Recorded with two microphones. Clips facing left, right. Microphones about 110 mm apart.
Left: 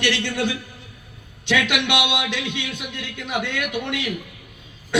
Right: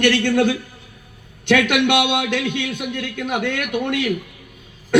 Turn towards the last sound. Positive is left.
turn(degrees=-50)  # may be behind; listen again after turning